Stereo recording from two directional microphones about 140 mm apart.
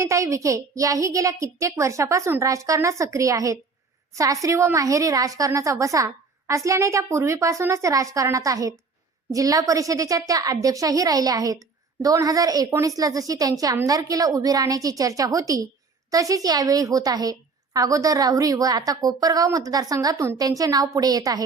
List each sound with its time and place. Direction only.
0.0 s a woman's voice: 20° right (ahead or behind)